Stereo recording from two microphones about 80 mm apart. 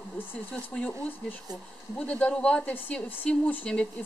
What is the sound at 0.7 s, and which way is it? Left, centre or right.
Speech, centre.